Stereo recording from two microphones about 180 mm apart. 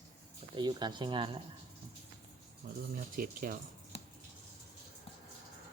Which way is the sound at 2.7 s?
50° right (ahead or behind).